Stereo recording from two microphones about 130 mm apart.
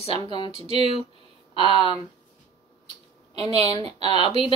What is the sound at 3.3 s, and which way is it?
Speech, 30° left (ahead or behind).